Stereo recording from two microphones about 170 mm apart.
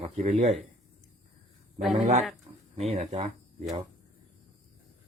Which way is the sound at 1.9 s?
45° right (ahead or behind).